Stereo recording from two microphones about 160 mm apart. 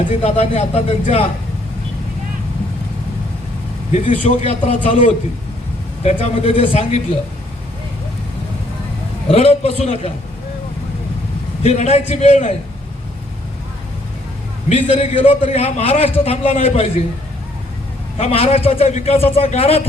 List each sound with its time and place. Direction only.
0.1 s a man's voice: 40° left (ahead or behind)
3.9 s a man's voice: 40° left (ahead or behind)
9.3 s a man's voice: 40° left (ahead or behind)
11.6 s a man's voice: 45° left (ahead or behind)
14.7 s a man's voice: 40° left (ahead or behind)
18.2 s a man's voice: 40° left (ahead or behind)